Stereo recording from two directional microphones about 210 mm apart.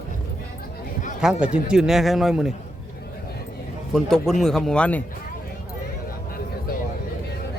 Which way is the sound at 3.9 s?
Centre (ahead or behind).